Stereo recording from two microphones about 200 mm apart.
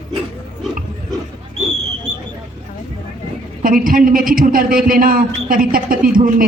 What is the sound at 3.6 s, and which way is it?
A man's voice, 45° right (ahead or behind).